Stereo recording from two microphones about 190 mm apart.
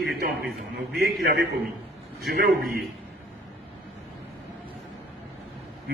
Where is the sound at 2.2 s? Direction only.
55° right (ahead or behind).